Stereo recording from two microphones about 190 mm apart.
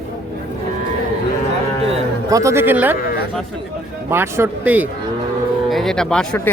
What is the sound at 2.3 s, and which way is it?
Speech, 15° right (ahead or behind).